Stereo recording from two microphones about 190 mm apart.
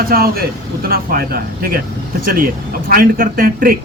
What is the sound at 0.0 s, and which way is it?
Speech, 50° right (ahead or behind).